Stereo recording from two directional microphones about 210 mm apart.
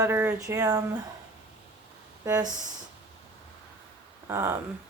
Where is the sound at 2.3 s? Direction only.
15° right (ahead or behind).